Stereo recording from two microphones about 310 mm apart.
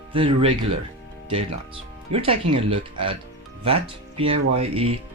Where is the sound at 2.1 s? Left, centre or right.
Centre.